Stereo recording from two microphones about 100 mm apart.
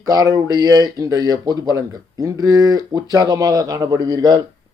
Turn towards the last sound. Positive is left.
turn(degrees=-40)  # may be behind; listen again after turning